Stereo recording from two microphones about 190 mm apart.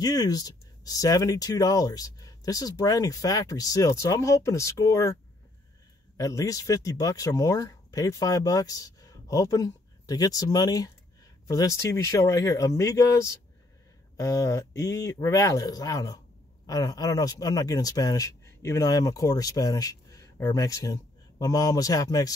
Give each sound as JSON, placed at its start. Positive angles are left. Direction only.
{"t": 0.0, "sound": "speech", "side_deg": 20}
{"t": 6.1, "sound": "speech", "side_deg": 15}